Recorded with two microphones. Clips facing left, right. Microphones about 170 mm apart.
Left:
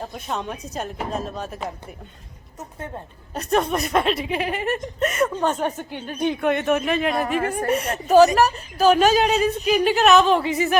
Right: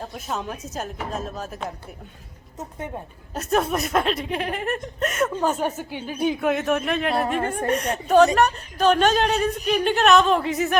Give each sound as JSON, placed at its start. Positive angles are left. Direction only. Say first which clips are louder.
{"t": 0.0, "sound": "speech", "louder": "left 1 dB", "side_deg": 0}
{"t": 2.6, "sound": "a woman's voice", "louder": "right 2 dB", "side_deg": -15}
{"t": 3.3, "sound": "speech", "louder": "left 1 dB", "side_deg": 0}